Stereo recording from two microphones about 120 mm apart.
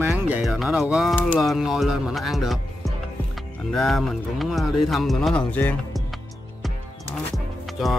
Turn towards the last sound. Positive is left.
turn(degrees=0)  # may be behind; listen again after turning